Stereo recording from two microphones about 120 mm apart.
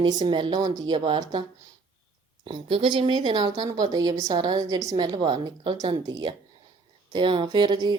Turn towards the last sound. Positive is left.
turn(degrees=-40)  # may be behind; listen again after turning